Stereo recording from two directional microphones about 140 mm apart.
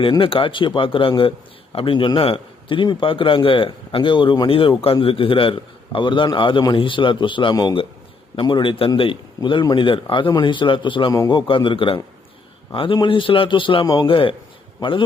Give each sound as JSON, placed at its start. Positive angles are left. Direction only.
{"t": 0.0, "sound": "a man's voice", "side_deg": 40}